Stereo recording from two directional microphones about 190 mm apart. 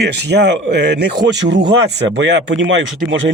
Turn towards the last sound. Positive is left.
turn(degrees=-80)